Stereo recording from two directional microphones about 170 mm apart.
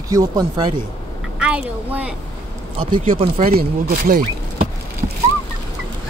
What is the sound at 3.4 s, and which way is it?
Speech, 60° right (ahead or behind).